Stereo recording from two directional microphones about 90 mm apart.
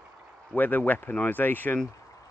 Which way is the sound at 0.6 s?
20° left (ahead or behind).